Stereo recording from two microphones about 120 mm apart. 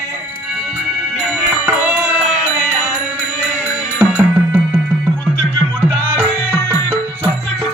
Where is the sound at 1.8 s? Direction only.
10° right (ahead or behind).